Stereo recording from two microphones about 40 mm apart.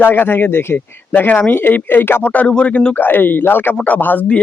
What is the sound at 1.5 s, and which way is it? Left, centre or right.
Speech, left.